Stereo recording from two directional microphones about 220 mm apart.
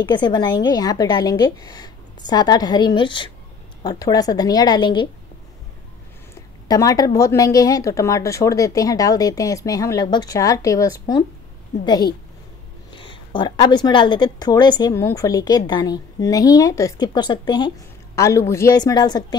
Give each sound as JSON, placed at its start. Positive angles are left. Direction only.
{"t": 0.0, "sound": "a woman's voice", "side_deg": 20}
{"t": 6.7, "sound": "a woman's voice", "side_deg": 15}